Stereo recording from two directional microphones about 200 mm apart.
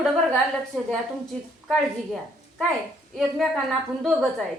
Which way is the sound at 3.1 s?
Centre (ahead or behind).